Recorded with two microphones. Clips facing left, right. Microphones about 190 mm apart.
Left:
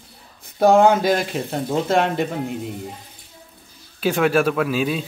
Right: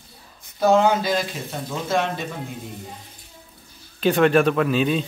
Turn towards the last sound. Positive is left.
turn(degrees=5)  # may be behind; listen again after turning